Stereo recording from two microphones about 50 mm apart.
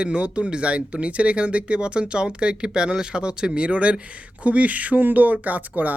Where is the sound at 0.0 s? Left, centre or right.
Right.